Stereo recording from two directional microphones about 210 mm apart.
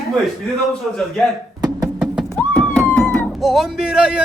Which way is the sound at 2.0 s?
Centre (ahead or behind).